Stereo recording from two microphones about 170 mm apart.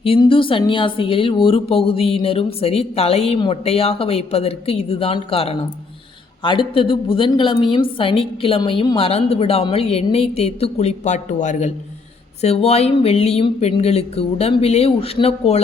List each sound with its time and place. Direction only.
0.0 s speech: 30° left (ahead or behind)